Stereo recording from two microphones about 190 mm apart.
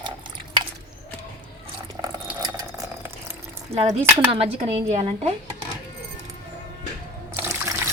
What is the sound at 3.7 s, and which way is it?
Speech, 30° right (ahead or behind).